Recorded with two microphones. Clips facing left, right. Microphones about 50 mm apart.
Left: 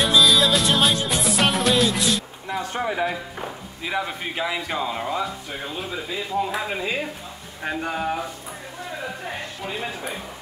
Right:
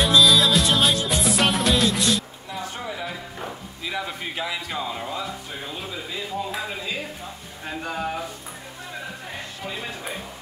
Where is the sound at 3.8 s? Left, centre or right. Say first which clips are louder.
Left 4 dB; centre.